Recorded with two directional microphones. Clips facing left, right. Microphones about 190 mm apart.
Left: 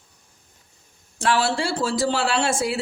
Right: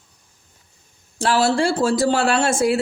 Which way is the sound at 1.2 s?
40° right (ahead or behind).